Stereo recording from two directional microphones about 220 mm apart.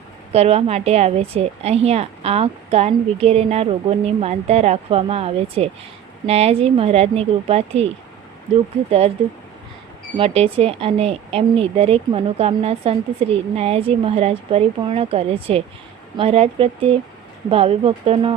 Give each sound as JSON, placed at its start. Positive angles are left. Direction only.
{"t": 0.3, "sound": "a woman's voice", "side_deg": -30}
{"t": 8.9, "sound": "a woman's voice", "side_deg": -25}
{"t": 10.2, "sound": "a woman's voice", "side_deg": -25}